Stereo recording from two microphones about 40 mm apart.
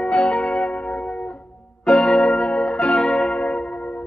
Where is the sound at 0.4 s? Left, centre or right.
Centre.